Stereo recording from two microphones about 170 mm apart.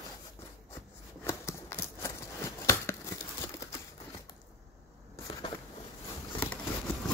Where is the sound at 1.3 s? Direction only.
15° left (ahead or behind).